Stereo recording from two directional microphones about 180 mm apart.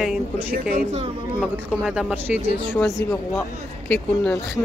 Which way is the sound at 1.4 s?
5° right (ahead or behind).